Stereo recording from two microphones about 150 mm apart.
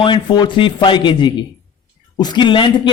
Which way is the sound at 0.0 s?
30° left (ahead or behind).